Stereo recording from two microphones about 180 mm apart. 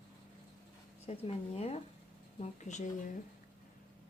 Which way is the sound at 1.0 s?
35° left (ahead or behind).